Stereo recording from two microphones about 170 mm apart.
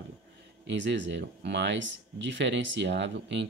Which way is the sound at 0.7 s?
90° right.